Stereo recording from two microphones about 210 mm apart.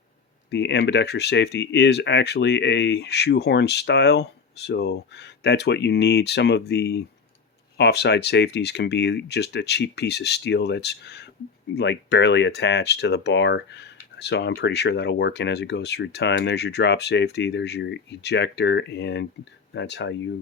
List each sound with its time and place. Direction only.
0.5 s speech: 55° left (ahead or behind)